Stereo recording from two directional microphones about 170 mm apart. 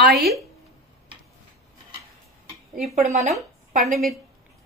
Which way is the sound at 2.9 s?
45° right (ahead or behind).